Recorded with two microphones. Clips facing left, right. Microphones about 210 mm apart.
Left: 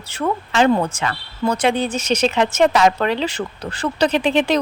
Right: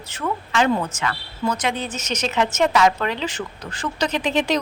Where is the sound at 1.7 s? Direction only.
10° left (ahead or behind).